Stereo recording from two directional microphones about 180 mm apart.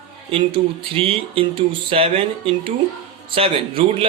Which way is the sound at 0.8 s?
30° right (ahead or behind).